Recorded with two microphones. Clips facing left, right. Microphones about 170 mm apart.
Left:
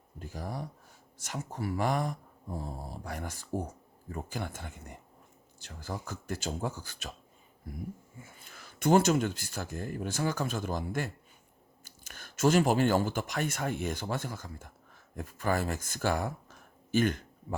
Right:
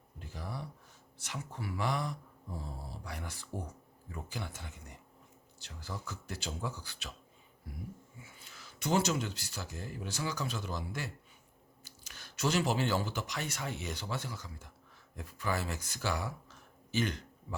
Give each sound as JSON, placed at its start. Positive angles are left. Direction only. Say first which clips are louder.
{"t": 0.2, "sound": "speech", "louder": "left 5 dB", "side_deg": 45}